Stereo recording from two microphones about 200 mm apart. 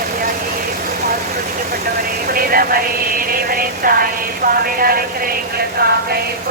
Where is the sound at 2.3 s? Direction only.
45° right (ahead or behind).